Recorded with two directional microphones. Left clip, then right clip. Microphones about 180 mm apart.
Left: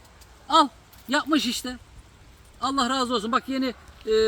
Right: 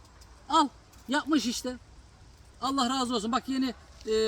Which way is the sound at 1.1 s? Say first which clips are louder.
Left 5 dB; centre (ahead or behind).